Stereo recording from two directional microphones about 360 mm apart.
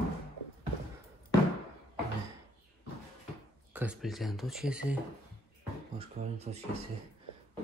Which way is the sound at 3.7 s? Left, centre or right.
Centre.